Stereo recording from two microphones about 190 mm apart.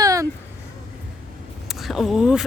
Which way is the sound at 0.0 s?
20° right (ahead or behind).